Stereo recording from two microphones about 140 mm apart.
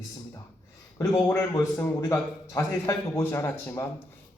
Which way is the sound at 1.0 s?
25° left (ahead or behind).